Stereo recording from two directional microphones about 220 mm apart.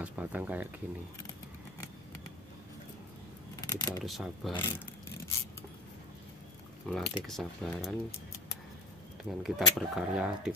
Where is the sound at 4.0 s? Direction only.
Centre (ahead or behind).